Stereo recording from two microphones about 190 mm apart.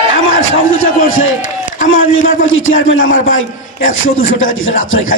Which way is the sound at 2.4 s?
90° left.